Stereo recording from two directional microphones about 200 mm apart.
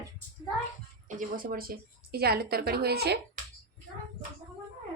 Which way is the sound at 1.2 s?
45° right (ahead or behind).